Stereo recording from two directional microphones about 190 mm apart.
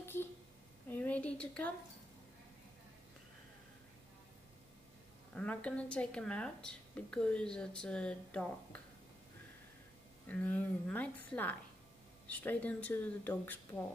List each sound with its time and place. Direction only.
0.0 s a sound: 10° left (ahead or behind)
5.3 s a woman's voice: 5° left (ahead or behind)
10.2 s a woman's voice: 10° left (ahead or behind)